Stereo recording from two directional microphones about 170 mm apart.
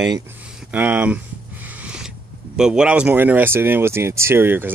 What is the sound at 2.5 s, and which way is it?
Speech, 5° right (ahead or behind).